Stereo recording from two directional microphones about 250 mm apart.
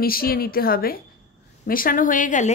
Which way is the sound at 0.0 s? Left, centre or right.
Left.